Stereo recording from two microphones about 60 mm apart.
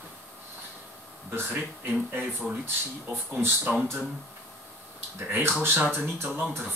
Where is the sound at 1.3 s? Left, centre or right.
Right.